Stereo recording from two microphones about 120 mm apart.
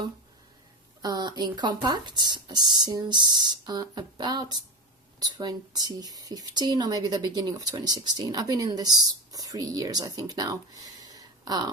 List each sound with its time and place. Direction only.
1.0 s speech: 35° right (ahead or behind)